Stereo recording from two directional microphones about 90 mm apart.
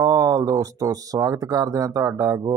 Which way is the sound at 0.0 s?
40° right (ahead or behind).